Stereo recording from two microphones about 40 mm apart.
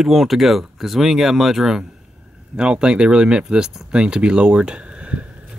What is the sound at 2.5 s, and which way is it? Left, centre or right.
Speech, right.